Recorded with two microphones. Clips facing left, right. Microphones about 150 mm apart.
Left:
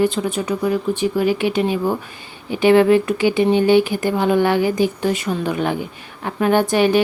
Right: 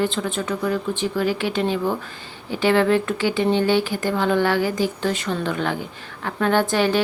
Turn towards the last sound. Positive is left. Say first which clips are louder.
# left 4 dB
turn(degrees=15)  # may be behind; listen again after turning